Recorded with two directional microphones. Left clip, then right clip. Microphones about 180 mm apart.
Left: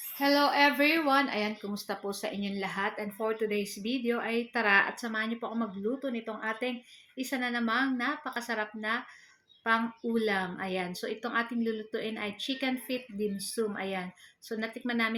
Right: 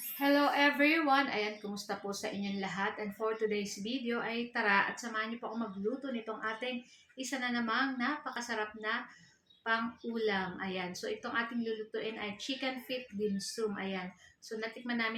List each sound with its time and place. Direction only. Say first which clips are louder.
0.2 s speech: left 4 dB; 40° left (ahead or behind)